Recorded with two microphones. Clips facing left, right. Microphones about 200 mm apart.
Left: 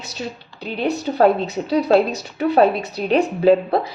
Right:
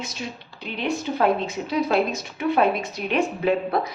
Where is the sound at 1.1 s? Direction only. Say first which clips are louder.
Left 6 dB; 40° left (ahead or behind).